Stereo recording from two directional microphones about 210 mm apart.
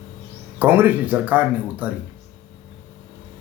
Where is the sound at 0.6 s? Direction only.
10° right (ahead or behind).